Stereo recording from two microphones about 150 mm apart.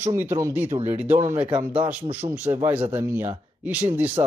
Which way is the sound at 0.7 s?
40° right (ahead or behind).